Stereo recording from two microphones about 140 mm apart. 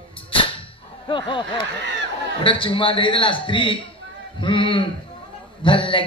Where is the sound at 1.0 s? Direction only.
35° left (ahead or behind).